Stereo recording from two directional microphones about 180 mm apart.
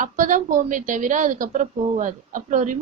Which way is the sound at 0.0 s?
45° right (ahead or behind).